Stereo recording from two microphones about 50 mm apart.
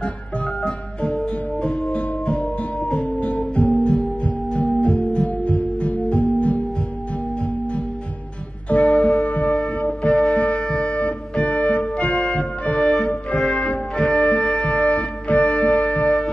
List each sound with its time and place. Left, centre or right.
0.6 s music: centre
8.6 s music: left
13.5 s music: left